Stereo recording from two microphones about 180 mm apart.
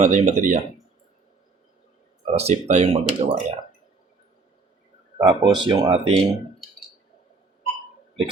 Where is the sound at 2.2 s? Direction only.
35° right (ahead or behind).